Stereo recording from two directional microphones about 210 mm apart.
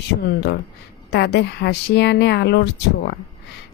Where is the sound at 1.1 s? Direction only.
50° left (ahead or behind).